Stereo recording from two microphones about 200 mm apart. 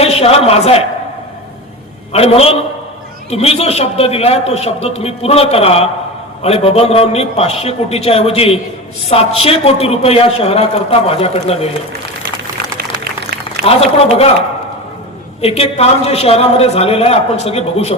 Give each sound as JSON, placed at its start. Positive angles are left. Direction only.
{"t": 0.0, "sound": "a man's voice", "side_deg": 30}
{"t": 2.1, "sound": "a man's voice", "side_deg": 30}
{"t": 13.7, "sound": "a man's voice", "side_deg": 30}
{"t": 15.4, "sound": "a man's voice", "side_deg": 30}